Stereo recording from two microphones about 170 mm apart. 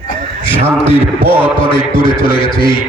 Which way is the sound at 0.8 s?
30° left (ahead or behind).